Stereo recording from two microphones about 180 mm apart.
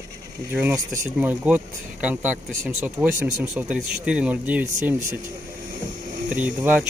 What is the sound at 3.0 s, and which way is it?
Speech, 20° right (ahead or behind).